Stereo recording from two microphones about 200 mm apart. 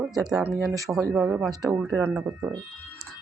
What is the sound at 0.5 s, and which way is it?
Speech, 15° right (ahead or behind).